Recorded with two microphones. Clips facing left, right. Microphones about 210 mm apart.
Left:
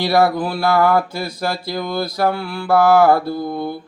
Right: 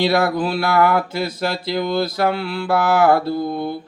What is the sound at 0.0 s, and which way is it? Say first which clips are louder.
Mantra: left 1 dB; 20° right (ahead or behind).